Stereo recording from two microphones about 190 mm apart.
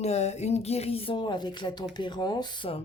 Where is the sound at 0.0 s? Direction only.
35° left (ahead or behind).